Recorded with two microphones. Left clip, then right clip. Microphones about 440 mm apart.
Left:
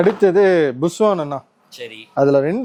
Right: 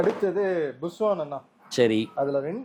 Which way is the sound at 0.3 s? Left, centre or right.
Left.